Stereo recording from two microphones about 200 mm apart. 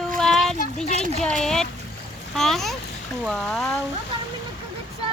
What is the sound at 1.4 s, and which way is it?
Speech, 5° left (ahead or behind).